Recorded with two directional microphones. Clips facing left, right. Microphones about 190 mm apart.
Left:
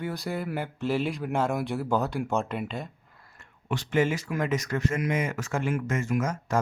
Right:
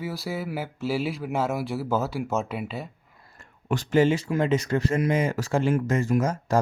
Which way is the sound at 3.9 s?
30° right (ahead or behind).